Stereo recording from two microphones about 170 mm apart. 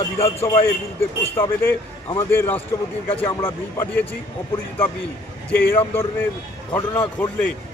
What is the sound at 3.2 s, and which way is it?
Speech, 25° left (ahead or behind).